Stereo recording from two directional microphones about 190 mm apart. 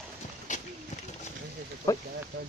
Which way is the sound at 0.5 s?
40° left (ahead or behind).